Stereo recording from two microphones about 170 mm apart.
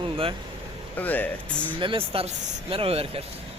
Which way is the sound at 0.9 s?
10° left (ahead or behind).